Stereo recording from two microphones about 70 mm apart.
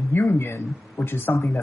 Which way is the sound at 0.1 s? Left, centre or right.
Left.